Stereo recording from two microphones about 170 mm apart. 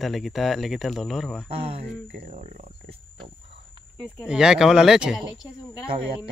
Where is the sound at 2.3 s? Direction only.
45° right (ahead or behind).